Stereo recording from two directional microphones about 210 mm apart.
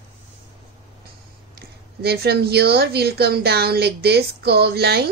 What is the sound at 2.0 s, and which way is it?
Speech, 50° right (ahead or behind).